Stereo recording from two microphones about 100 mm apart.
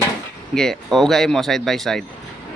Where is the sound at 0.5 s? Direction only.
5° left (ahead or behind).